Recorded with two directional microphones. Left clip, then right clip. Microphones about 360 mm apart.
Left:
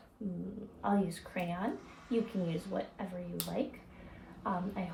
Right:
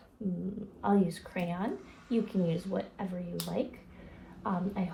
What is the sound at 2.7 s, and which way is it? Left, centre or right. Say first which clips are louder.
Speech: left 1 dB; right.